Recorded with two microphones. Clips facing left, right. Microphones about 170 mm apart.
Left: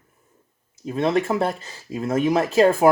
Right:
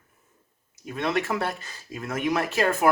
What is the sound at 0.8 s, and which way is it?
Speech, 30° left (ahead or behind).